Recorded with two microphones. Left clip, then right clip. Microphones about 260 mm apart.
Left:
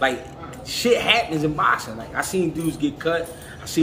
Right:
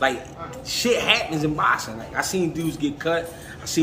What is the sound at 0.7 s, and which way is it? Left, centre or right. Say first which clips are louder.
Speech: left 1 dB; centre.